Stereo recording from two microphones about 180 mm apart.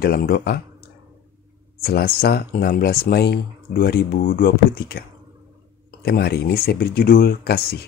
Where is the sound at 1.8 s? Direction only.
60° left (ahead or behind).